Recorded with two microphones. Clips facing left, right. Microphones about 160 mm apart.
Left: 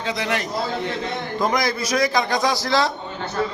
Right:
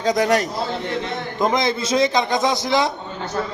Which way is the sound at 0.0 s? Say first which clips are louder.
Right 7 dB; 40° right (ahead or behind).